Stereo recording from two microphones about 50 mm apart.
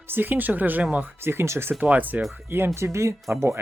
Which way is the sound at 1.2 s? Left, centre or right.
Right.